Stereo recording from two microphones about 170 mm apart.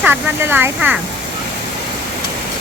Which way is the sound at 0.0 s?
10° right (ahead or behind).